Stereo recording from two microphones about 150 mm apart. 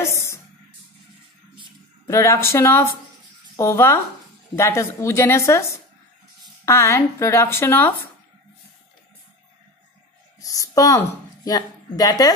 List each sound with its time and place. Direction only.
0.0 s music: 15° left (ahead or behind)
2.0 s a woman's voice: 20° left (ahead or behind)
10.4 s a woman's voice: 20° left (ahead or behind)